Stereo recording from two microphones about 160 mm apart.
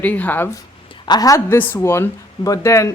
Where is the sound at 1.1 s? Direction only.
25° left (ahead or behind).